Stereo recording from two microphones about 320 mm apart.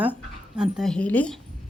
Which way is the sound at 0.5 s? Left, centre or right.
Centre.